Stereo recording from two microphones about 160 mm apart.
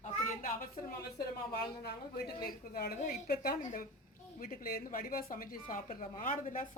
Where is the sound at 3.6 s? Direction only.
50° left (ahead or behind).